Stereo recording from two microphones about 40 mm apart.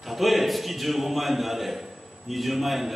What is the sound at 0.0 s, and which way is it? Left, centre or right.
A man's voice, centre.